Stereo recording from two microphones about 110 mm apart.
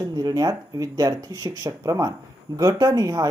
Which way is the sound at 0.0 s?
35° right (ahead or behind).